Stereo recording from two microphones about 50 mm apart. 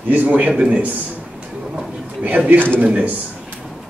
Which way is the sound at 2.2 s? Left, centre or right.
Right.